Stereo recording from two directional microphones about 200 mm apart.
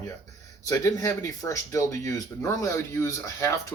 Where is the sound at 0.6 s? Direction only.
15° left (ahead or behind).